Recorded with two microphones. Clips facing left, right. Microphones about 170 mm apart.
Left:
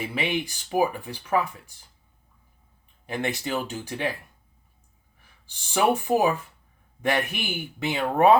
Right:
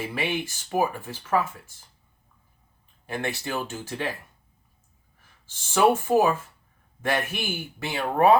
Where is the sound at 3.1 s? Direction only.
20° left (ahead or behind).